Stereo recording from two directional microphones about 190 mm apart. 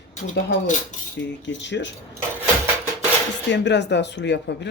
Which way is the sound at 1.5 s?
70° left (ahead or behind).